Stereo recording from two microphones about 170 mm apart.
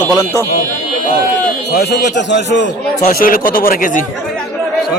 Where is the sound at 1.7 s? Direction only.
75° left (ahead or behind); by 2.6 s 90° left.